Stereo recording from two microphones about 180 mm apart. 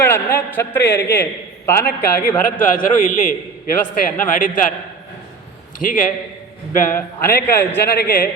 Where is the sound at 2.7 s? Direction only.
50° left (ahead or behind).